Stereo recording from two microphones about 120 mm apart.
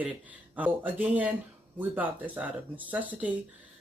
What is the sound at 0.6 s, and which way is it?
Speech, 15° right (ahead or behind).